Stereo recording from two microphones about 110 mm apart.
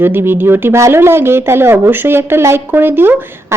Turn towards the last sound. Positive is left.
turn(degrees=-20)  # may be behind; listen again after turning